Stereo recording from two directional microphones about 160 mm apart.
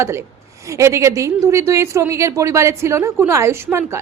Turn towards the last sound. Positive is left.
turn(degrees=-15)  # may be behind; listen again after turning